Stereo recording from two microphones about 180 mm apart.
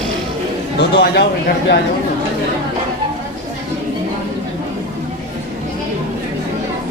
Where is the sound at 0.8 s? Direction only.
65° left (ahead or behind).